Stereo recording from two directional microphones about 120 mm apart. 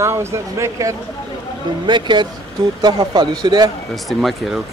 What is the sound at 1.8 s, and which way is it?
Speech, 40° right (ahead or behind).